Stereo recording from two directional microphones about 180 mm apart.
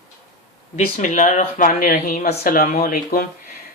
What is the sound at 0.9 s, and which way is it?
Speech, 45° left (ahead or behind).